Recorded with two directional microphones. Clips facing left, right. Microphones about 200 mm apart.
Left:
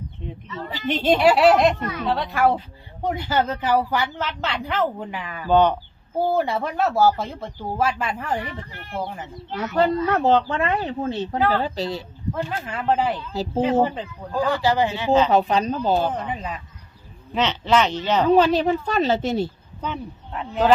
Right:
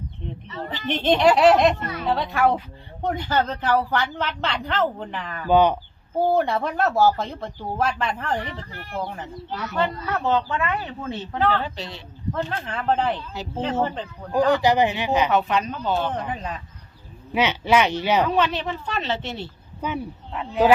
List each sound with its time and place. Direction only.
0.7 s a woman's voice: 10° left (ahead or behind)
5.5 s speech: 10° right (ahead or behind)
6.1 s a woman's voice: 5° left (ahead or behind)
9.6 s speech: 40° left (ahead or behind)
11.3 s a woman's voice: 10° left (ahead or behind)
11.6 s speech: 40° left (ahead or behind)
12.3 s a woman's voice: 5° left (ahead or behind)
14.3 s speech: 15° right (ahead or behind)
15.3 s speech: 35° left (ahead or behind)
16.1 s speech: centre (ahead or behind)
17.3 s speech: 10° right (ahead or behind)
18.3 s speech: 40° left (ahead or behind)
19.8 s speech: 10° right (ahead or behind)